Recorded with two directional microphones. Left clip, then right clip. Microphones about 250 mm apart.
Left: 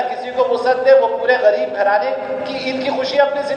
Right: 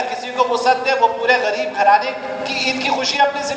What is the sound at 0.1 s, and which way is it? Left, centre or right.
A man's voice, right.